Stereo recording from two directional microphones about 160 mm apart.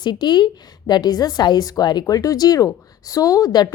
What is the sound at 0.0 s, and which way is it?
A woman's voice, 25° left (ahead or behind).